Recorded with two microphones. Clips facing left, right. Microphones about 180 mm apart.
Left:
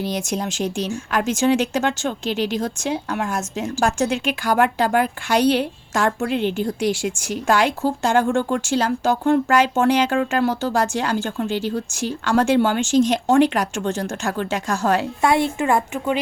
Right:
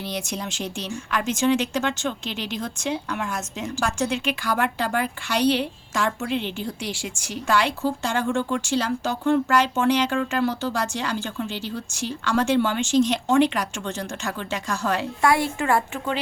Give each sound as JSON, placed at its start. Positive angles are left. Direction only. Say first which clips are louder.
{"t": 0.0, "sound": "speech", "louder": "left 6 dB", "side_deg": 45}
{"t": 15.2, "sound": "a woman's voice", "louder": "even", "side_deg": 25}